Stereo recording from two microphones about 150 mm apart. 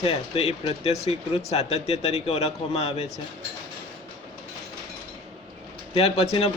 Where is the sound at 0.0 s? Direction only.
40° left (ahead or behind).